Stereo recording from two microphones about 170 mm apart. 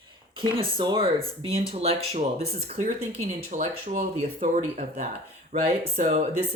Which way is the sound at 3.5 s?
35° right (ahead or behind).